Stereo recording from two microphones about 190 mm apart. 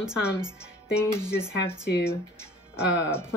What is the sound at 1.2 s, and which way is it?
Speech, 15° left (ahead or behind).